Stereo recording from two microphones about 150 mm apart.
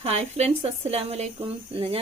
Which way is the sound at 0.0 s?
45° right (ahead or behind).